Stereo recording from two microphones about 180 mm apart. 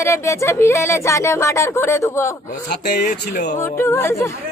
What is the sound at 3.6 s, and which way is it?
Speech, 15° left (ahead or behind).